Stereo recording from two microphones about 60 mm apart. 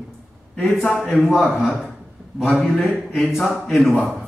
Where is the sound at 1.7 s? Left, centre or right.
Centre.